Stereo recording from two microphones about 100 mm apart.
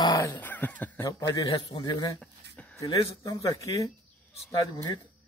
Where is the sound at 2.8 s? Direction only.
40° left (ahead or behind).